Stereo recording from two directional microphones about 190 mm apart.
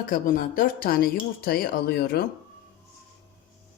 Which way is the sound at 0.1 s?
45° left (ahead or behind).